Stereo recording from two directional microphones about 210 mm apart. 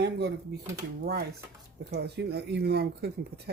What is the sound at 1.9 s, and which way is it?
Speech, 50° right (ahead or behind).